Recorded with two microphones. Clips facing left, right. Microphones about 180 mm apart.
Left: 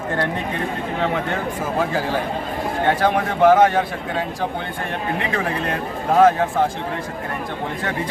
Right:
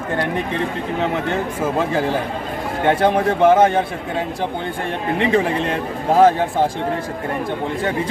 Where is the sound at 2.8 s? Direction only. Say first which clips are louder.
Right 4 dB; 25° right (ahead or behind).